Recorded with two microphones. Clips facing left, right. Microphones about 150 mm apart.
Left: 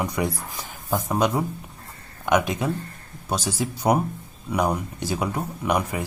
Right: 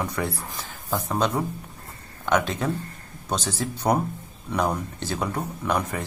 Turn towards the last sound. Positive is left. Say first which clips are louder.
# left 2 dB
turn(degrees=10)  # may be behind; listen again after turning